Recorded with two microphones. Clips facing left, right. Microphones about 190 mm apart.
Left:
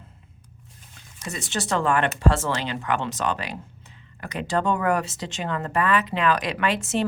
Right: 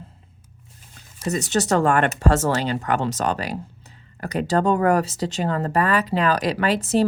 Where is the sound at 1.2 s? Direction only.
40° right (ahead or behind).